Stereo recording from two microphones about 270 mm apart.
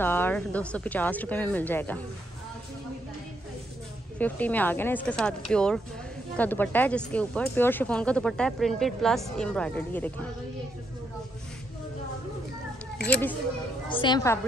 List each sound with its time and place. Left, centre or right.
0.0 s a woman's voice: centre
4.2 s speech: centre
13.0 s speech: centre
13.8 s a woman's voice: centre